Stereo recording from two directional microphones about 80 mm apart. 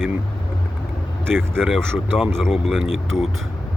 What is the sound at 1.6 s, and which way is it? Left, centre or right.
Speech, centre.